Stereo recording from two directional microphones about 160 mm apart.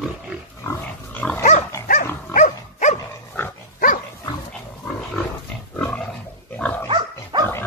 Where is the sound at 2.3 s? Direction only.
50° left (ahead or behind).